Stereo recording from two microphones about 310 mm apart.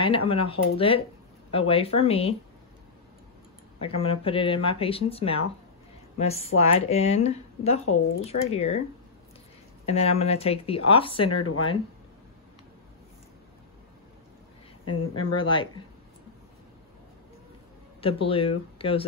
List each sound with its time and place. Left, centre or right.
0.3 s speech: centre
3.8 s speech: centre
9.8 s speech: centre
11.2 s speech: left
14.9 s speech: left
15.3 s speech: centre
18.0 s speech: centre